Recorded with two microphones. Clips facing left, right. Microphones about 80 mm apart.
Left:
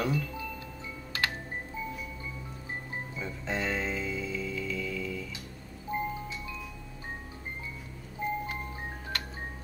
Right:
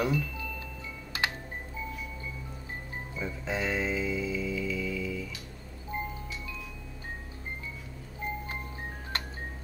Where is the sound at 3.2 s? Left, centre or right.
Centre.